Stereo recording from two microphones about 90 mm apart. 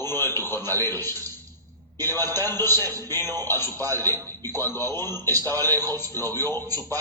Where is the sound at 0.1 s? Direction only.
25° left (ahead or behind).